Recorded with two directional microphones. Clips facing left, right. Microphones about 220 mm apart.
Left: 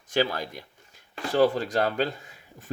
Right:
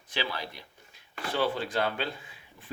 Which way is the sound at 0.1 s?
45° left (ahead or behind).